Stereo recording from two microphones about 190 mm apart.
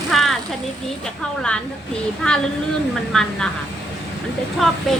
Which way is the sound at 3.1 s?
Centre (ahead or behind).